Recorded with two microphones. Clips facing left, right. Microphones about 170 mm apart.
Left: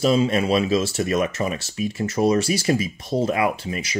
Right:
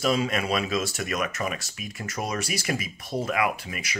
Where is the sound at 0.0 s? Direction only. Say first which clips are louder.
Left 6 dB; 30° left (ahead or behind).